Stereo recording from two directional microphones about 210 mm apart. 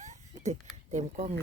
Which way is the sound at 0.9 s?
35° right (ahead or behind).